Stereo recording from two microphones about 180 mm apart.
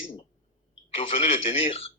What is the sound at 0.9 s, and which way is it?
Speech, 35° left (ahead or behind).